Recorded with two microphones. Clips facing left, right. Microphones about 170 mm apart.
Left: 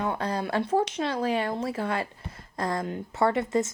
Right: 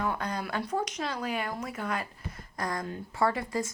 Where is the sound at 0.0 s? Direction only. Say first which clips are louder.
Left 3 dB; 30° left (ahead or behind).